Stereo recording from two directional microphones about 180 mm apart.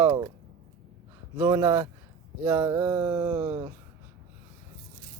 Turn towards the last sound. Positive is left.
turn(degrees=-25)  # may be behind; listen again after turning